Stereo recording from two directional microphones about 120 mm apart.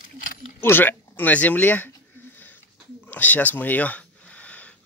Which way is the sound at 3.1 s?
15° left (ahead or behind).